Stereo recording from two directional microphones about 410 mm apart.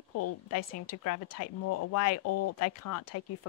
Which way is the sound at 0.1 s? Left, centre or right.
Left.